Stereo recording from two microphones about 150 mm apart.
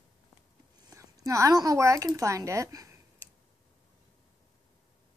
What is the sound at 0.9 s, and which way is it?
A woman's voice, 20° right (ahead or behind).